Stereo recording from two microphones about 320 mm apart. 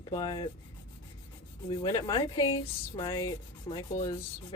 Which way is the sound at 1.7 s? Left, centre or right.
Centre.